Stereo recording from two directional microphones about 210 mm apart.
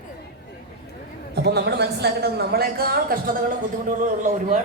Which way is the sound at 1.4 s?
50° right (ahead or behind).